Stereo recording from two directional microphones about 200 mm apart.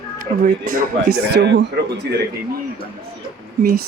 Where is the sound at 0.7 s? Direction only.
50° right (ahead or behind).